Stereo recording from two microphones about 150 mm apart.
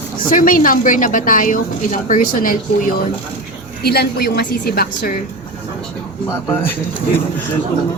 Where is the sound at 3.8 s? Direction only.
90° left.